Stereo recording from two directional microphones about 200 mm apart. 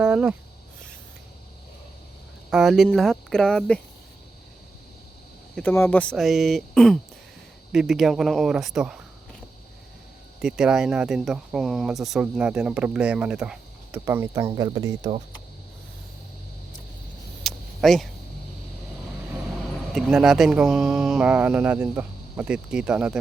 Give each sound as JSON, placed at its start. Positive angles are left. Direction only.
{"t": 0.0, "sound": "speech", "side_deg": -5}
{"t": 2.5, "sound": "speech", "side_deg": 0}
{"t": 5.5, "sound": "speech", "side_deg": 10}
{"t": 10.4, "sound": "speech", "side_deg": -5}
{"t": 17.4, "sound": "vehicle", "side_deg": 0}
{"t": 19.9, "sound": "speech", "side_deg": 0}